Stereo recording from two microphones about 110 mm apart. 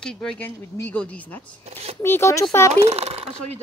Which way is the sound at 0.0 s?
5° left (ahead or behind).